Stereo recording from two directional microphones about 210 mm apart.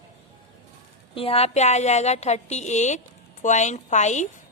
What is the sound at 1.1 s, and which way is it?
A woman's voice, 25° left (ahead or behind).